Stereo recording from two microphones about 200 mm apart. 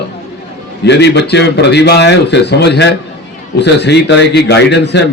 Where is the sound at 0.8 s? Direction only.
60° left (ahead or behind).